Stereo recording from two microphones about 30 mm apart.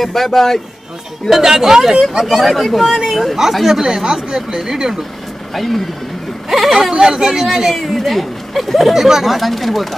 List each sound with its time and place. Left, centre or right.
0.0 s a man's voice: centre
1.3 s speech: centre
3.8 s speech: right
5.5 s speech: centre
6.9 s speech: right
7.7 s speech: centre
8.9 s speech: centre